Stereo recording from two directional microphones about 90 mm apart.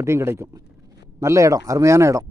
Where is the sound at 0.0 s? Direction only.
30° right (ahead or behind).